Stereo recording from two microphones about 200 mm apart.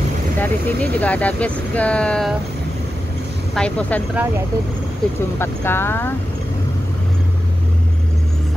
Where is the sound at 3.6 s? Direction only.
5° left (ahead or behind).